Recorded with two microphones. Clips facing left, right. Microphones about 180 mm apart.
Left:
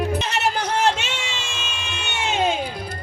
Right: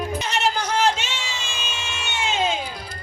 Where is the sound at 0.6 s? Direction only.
65° left (ahead or behind).